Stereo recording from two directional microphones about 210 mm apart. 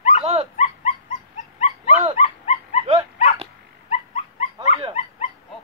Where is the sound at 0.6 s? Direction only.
30° left (ahead or behind).